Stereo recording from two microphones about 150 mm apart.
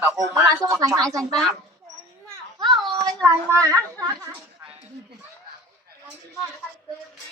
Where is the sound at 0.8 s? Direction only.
25° right (ahead or behind).